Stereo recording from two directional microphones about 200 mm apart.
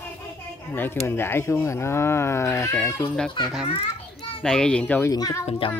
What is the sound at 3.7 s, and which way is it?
Children playing, 30° left (ahead or behind).